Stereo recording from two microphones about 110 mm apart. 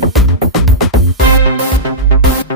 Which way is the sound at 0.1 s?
Centre (ahead or behind).